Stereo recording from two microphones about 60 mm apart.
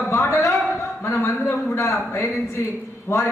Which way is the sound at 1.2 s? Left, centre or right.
Left.